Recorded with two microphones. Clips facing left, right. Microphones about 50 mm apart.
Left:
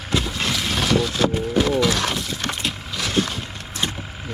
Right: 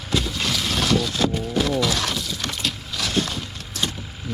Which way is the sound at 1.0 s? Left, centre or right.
Left.